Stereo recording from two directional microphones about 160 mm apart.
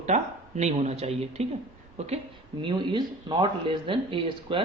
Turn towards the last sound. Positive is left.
turn(degrees=-30)  # may be behind; listen again after turning